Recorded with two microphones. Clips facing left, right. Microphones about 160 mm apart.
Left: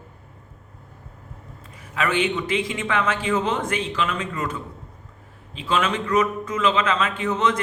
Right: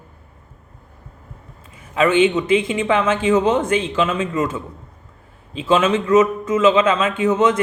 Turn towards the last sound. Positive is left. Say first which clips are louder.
# right 6 dB
turn(degrees=-20)  # may be behind; listen again after turning